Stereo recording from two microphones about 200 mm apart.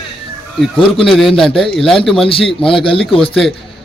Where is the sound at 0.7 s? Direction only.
25° left (ahead or behind).